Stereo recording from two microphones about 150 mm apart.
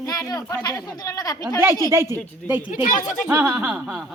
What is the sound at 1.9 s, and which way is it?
Speech, 20° right (ahead or behind).